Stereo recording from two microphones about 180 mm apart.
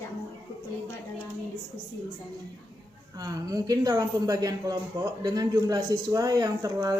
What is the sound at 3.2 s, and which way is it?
Speech, 20° right (ahead or behind).